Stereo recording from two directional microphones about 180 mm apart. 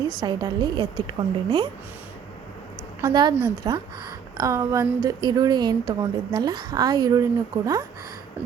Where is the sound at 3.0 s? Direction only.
25° right (ahead or behind).